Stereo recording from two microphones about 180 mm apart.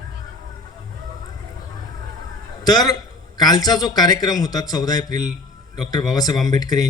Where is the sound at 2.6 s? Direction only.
20° left (ahead or behind).